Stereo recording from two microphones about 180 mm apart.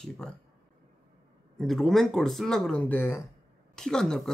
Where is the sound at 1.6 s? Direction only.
Centre (ahead or behind).